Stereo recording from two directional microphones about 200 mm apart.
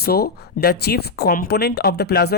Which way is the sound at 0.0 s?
50° left (ahead or behind).